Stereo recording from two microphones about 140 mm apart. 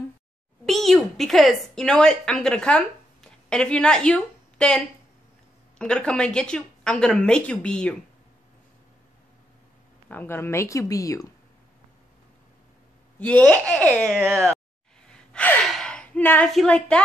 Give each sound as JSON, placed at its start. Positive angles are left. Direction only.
{"t": 0.7, "sound": "a woman's voice", "side_deg": 0}
{"t": 10.0, "sound": "speech", "side_deg": 15}
{"t": 13.2, "sound": "a woman's voice", "side_deg": 10}
{"t": 15.3, "sound": "gasp", "side_deg": 5}
{"t": 16.5, "sound": "a woman's voice", "side_deg": 5}